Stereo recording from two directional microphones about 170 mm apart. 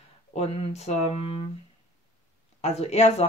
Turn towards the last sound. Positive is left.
turn(degrees=40)  # may be behind; listen again after turning